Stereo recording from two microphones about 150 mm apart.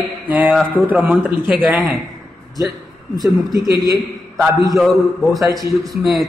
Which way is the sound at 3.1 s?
25° right (ahead or behind).